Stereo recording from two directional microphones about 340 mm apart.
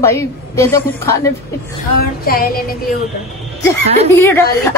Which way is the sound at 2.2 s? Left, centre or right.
Left.